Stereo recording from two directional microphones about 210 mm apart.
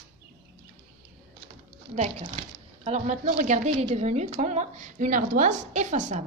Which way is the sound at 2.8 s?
35° right (ahead or behind).